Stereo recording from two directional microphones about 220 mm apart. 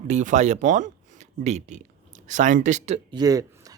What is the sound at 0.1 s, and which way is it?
Speech, 35° right (ahead or behind).